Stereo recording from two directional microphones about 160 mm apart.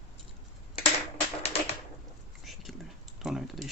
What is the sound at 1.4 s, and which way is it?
Typewriter, 40° left (ahead or behind).